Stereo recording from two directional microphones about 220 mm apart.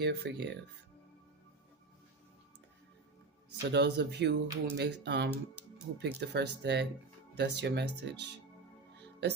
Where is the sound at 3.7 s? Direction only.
50° right (ahead or behind).